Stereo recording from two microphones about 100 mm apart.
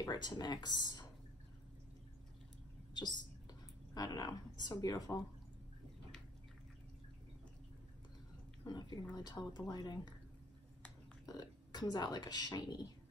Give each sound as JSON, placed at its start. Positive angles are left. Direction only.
{"t": 0.0, "sound": "speech", "side_deg": 45}
{"t": 2.9, "sound": "a sound", "side_deg": 45}
{"t": 3.9, "sound": "a woman's voice", "side_deg": 40}
{"t": 8.6, "sound": "speech", "side_deg": 45}
{"t": 11.2, "sound": "speech", "side_deg": 40}